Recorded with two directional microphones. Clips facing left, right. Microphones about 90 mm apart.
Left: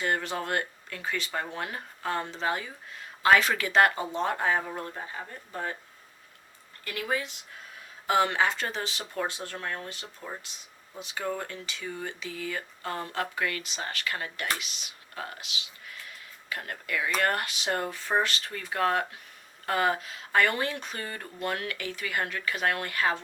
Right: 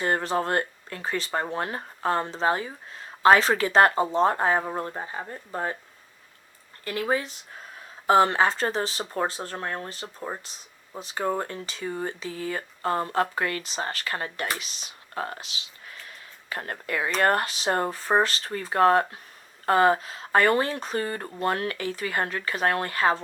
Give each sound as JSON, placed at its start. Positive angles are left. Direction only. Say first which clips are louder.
{"t": 0.0, "sound": "speech", "louder": "right 5 dB", "side_deg": -35}
{"t": 6.8, "sound": "speech", "louder": "right 5 dB", "side_deg": -35}